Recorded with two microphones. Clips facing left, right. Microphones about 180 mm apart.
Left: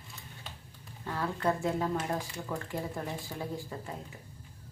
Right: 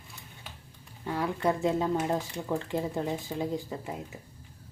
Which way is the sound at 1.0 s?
15° right (ahead or behind).